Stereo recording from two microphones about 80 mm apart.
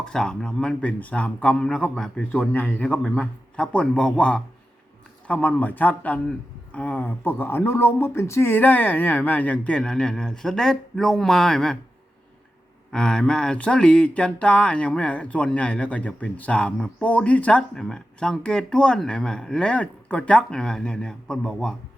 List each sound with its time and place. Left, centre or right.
0.0 s speech: centre
12.9 s speech: centre